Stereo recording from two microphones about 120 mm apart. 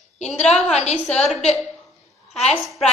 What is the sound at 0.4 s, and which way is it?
Speech, 60° left (ahead or behind).